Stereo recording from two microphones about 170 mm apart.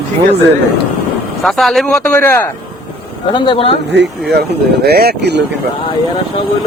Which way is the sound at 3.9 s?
75° right (ahead or behind).